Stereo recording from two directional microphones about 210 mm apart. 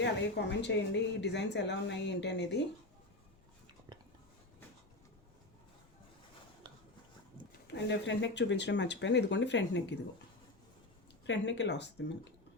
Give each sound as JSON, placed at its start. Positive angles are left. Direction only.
{"t": 0.0, "sound": "speech", "side_deg": 55}
{"t": 7.7, "sound": "speech", "side_deg": 55}
{"t": 11.3, "sound": "speech", "side_deg": 55}